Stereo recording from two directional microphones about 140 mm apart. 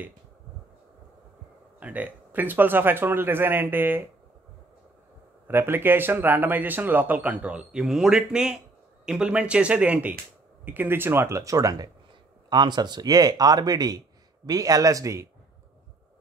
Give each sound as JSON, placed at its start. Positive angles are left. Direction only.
{"t": 1.8, "sound": "speech", "side_deg": -10}
{"t": 5.5, "sound": "speech", "side_deg": -15}